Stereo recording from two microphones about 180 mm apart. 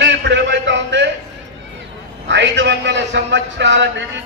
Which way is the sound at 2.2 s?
80° right.